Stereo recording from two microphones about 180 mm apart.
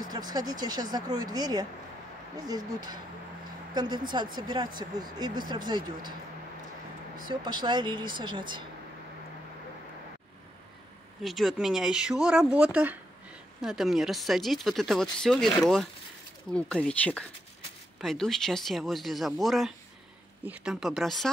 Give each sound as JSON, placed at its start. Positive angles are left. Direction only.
{"t": 0.0, "sound": "speech", "side_deg": -20}
{"t": 7.2, "sound": "speech", "side_deg": -25}
{"t": 11.2, "sound": "speech", "side_deg": 0}